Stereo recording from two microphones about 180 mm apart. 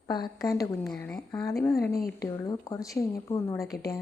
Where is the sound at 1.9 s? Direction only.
55° left (ahead or behind).